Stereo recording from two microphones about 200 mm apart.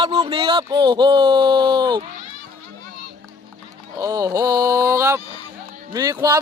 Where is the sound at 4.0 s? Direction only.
15° right (ahead or behind).